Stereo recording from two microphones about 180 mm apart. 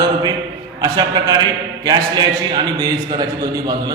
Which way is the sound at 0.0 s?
25° right (ahead or behind).